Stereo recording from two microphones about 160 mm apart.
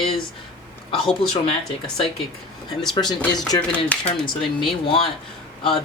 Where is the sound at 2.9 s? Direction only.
25° left (ahead or behind).